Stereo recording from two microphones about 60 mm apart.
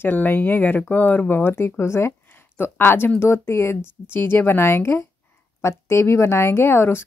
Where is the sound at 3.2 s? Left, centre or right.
Left.